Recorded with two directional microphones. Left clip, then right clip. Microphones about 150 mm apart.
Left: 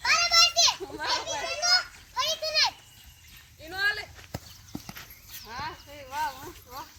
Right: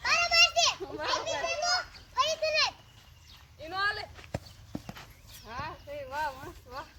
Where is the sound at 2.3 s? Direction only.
10° right (ahead or behind).